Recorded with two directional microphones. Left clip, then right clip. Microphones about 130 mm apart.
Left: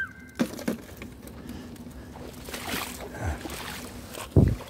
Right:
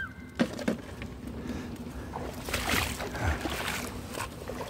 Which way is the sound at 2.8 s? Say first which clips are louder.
Right 3 dB; 20° left (ahead or behind).